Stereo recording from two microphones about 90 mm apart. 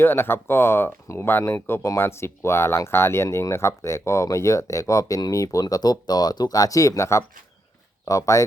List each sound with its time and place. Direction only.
0.0 s speech: 25° left (ahead or behind)